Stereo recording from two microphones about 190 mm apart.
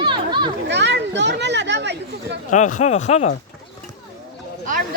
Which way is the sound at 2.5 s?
40° left (ahead or behind).